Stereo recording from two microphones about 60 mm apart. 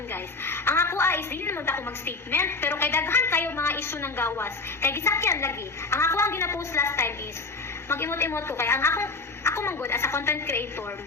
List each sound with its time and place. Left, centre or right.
0.1 s a woman's voice: left